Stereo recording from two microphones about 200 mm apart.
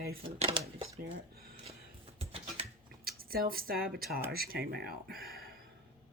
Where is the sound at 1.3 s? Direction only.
50° right (ahead or behind).